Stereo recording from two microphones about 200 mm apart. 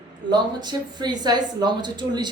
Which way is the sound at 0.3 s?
20° right (ahead or behind).